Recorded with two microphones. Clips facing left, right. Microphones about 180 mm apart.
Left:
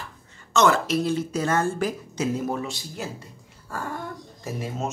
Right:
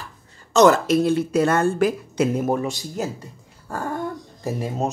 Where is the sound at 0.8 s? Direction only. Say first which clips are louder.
Right 5 dB; 55° right (ahead or behind).